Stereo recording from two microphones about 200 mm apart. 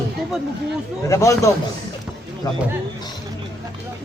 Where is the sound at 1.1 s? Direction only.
15° left (ahead or behind).